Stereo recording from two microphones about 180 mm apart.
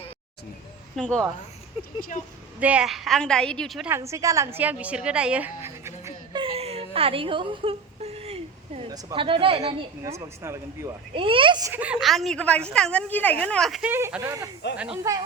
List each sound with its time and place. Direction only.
0.9 s a woman's voice: 5° left (ahead or behind)
2.6 s a woman's voice: 5° right (ahead or behind)
3.8 s a woman's voice: 15° right (ahead or behind)
6.4 s whimper: 35° right (ahead or behind)
8.9 s a man's voice: 20° right (ahead or behind)
10.0 s speech: 15° right (ahead or behind)
11.1 s a man's voice: 30° right (ahead or behind)
11.7 s a woman's voice: 5° right (ahead or behind)
13.9 s speech: 15° right (ahead or behind)